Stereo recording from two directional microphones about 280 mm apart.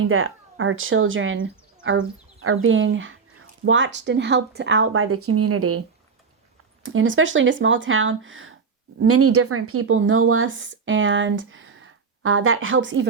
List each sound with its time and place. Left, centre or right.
0.1 s speech: right
6.8 s speech: right